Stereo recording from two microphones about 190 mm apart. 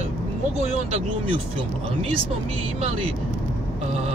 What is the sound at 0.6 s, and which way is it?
Speech, 30° right (ahead or behind).